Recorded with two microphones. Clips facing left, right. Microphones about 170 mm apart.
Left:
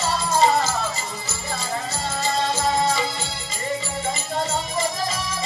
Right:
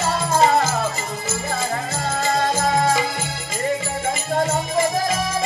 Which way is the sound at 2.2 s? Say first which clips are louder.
Right 3 dB; 50° right (ahead or behind).